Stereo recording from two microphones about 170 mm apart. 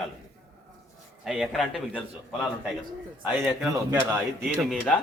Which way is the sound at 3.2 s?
10° right (ahead or behind).